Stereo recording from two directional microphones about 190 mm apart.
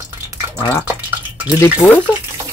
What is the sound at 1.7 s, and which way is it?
Speech, 10° left (ahead or behind).